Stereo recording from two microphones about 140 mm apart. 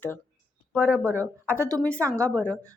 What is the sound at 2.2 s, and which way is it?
Speech, 5° left (ahead or behind).